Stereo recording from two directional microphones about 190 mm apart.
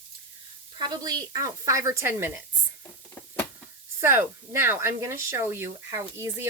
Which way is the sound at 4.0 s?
15° right (ahead or behind).